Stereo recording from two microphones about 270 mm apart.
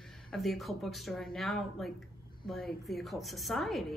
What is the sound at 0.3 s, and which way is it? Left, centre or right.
A woman's voice, centre.